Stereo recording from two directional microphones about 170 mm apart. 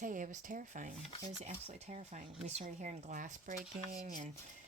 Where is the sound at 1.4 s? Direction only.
40° right (ahead or behind).